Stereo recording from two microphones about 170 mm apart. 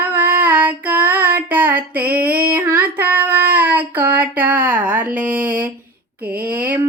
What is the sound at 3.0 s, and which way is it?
Child singing, 10° right (ahead or behind).